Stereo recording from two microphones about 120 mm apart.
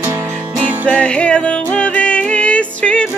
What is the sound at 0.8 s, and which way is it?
Music, 10° left (ahead or behind).